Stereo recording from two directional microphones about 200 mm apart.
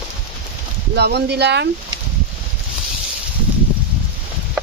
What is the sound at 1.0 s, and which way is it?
Speech, 55° right (ahead or behind).